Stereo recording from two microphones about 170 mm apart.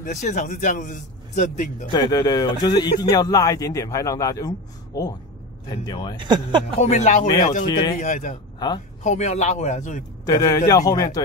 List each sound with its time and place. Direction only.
0.0 s a man's voice: 45° left (ahead or behind)
1.9 s speech: 25° left (ahead or behind)
6.1 s speech: 25° right (ahead or behind)
6.8 s a man's voice: 45° left (ahead or behind)
7.6 s speech: 25° left (ahead or behind)
8.0 s a man's voice: 50° left (ahead or behind)
8.5 s speech: 25° left (ahead or behind)
9.0 s a man's voice: 45° left (ahead or behind)
10.2 s speech: 20° left (ahead or behind)